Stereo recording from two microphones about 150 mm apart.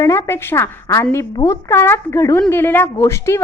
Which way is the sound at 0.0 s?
20° left (ahead or behind).